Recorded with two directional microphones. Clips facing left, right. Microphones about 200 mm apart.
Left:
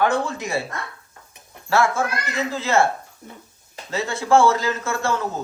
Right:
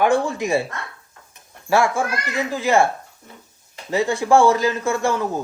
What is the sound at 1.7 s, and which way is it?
A man's voice, 15° right (ahead or behind).